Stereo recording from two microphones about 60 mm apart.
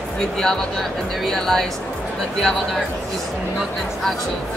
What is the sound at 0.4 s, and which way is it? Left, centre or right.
Speech, centre.